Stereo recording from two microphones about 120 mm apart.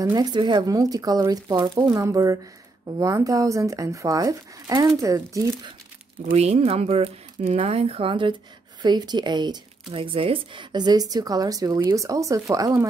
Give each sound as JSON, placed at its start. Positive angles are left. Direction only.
{"t": 0.1, "sound": "speech", "side_deg": -35}
{"t": 6.3, "sound": "speech", "side_deg": -65}